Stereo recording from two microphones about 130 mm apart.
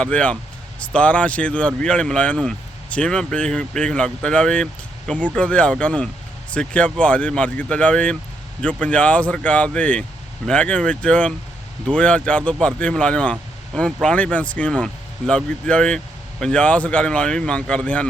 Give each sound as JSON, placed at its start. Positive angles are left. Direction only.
{"t": 0.0, "sound": "speech", "side_deg": 10}